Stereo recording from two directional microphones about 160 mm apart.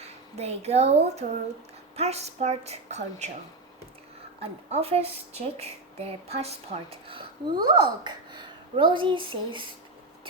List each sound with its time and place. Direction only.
0.3 s a woman's voice: 40° right (ahead or behind)
4.4 s a woman's voice: 40° right (ahead or behind)